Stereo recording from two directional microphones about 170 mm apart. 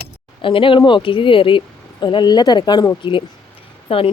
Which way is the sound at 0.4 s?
30° left (ahead or behind).